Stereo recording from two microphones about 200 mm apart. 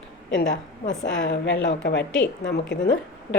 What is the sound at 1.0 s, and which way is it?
A woman's voice, 65° left (ahead or behind).